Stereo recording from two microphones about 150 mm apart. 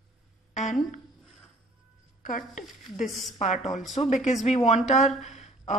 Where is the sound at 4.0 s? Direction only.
40° left (ahead or behind).